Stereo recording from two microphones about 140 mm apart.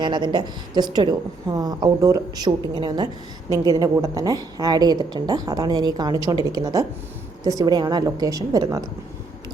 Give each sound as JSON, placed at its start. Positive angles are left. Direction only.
{"t": 0.0, "sound": "a woman's voice", "side_deg": -35}